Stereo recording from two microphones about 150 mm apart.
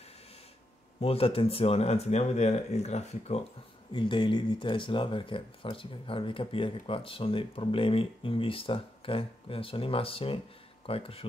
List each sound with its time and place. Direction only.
1.0 s speech: 40° left (ahead or behind)
3.9 s speech: 35° left (ahead or behind)